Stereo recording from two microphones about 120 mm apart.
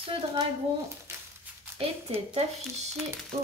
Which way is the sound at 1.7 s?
55° right (ahead or behind).